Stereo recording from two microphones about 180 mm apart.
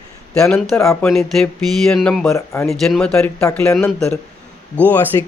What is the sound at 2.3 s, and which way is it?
Speech, 15° left (ahead or behind).